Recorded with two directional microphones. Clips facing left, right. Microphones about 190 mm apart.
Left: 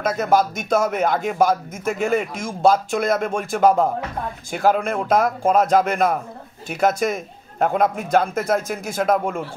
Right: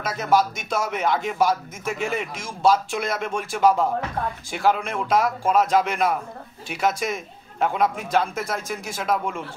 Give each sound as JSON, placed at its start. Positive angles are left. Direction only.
{"t": 0.0, "sound": "a man's voice", "side_deg": 50}